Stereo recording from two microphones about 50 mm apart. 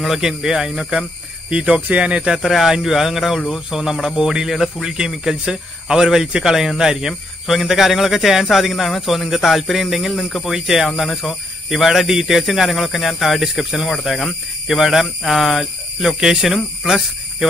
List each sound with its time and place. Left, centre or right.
0.0 s speech: centre
1.5 s speech: right
2.4 s speech: centre
3.3 s speech: centre
3.7 s speech: centre
10.5 s speech: centre